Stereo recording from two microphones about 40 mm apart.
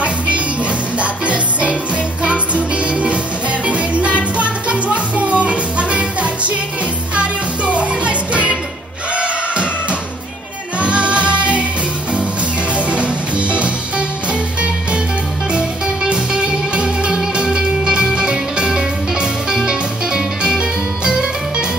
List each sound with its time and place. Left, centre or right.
0.9 s music: right
12.7 s music: right
15.5 s music: right